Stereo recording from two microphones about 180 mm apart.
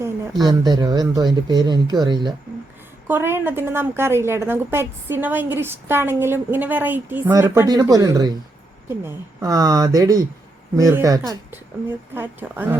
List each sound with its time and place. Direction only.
0.0 s speech: 20° right (ahead or behind)
3.1 s a woman's voice: 10° right (ahead or behind)